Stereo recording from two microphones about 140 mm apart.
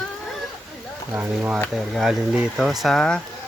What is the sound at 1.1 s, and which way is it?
Speech, 15° right (ahead or behind).